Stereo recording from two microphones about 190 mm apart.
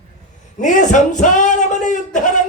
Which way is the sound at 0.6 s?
40° left (ahead or behind).